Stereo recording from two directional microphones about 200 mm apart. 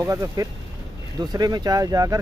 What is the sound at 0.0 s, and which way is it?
Speech, 15° right (ahead or behind).